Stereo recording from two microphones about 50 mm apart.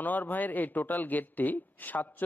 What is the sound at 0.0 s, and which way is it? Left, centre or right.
A man's voice, left.